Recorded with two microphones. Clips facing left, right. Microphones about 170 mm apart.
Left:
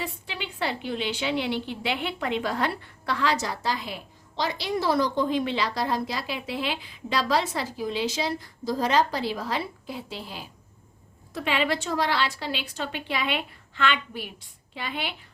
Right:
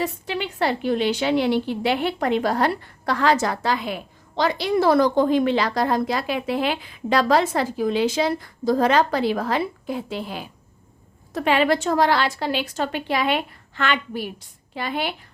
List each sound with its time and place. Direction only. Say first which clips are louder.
0.0 s a woman's voice: right 8 dB; 45° right (ahead or behind)